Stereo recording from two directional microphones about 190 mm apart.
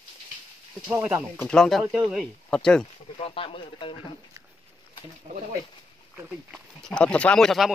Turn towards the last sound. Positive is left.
turn(degrees=0)  # may be behind; listen again after turning